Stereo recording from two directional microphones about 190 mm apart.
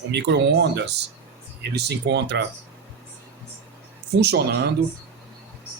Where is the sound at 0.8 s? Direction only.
65° right (ahead or behind).